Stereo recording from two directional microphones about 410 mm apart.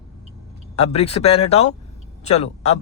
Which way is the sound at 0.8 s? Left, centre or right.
Centre.